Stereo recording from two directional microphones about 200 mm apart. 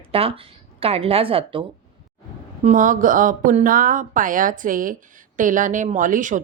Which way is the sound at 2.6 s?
40° right (ahead or behind).